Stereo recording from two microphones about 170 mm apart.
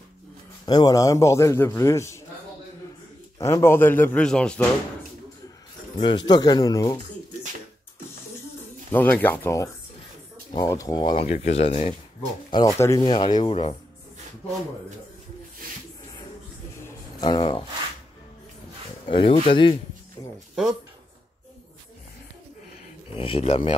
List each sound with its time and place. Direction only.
0.7 s a man's voice: 25° left (ahead or behind)
3.3 s a man's voice: 15° left (ahead or behind)
5.9 s speech: 25° left (ahead or behind)
8.9 s a man's voice: 10° left (ahead or behind)
11.2 s speech: 40° left (ahead or behind)
12.4 s speech: 20° left (ahead or behind)
16.8 s a sound: 25° left (ahead or behind)
19.0 s speech: 30° left (ahead or behind)
23.1 s speech: 30° left (ahead or behind)